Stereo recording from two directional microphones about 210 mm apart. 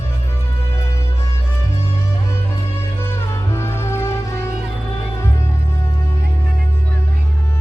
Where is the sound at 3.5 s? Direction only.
10° left (ahead or behind).